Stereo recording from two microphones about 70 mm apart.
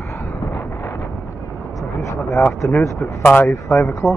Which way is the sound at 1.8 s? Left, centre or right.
Left.